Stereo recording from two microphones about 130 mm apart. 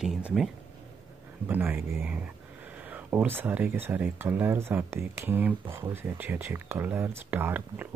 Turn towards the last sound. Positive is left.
turn(degrees=-15)  # may be behind; listen again after turning